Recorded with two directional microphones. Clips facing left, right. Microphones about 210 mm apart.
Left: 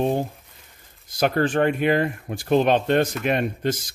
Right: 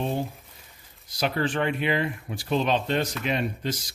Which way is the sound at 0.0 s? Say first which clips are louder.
Left 6 dB; 55° left (ahead or behind).